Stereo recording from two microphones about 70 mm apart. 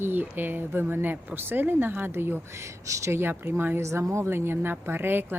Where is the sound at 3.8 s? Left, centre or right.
Right.